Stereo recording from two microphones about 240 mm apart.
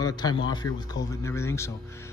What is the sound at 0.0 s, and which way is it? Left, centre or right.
Speech, centre.